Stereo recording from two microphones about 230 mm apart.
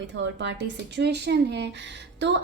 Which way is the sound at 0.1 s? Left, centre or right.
Right.